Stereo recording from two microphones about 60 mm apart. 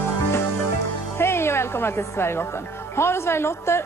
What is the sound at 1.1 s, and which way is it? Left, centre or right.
Speech, left.